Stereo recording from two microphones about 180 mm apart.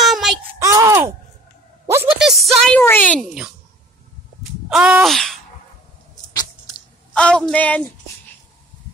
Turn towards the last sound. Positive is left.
turn(degrees=10)  # may be behind; listen again after turning